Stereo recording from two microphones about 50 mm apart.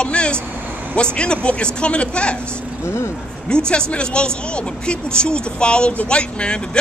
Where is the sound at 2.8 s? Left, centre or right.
Left.